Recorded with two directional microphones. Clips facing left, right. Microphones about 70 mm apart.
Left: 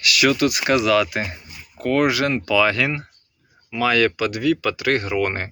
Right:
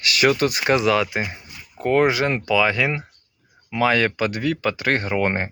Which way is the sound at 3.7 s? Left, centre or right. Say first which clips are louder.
Even; right.